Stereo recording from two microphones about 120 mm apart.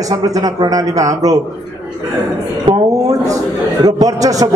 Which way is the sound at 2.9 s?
30° right (ahead or behind).